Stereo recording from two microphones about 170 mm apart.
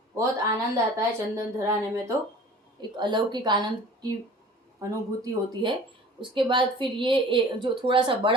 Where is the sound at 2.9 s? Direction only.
25° right (ahead or behind).